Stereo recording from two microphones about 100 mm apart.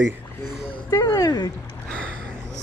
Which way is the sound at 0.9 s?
30° left (ahead or behind).